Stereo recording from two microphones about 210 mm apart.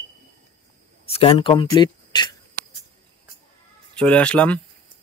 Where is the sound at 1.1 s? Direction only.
25° left (ahead or behind).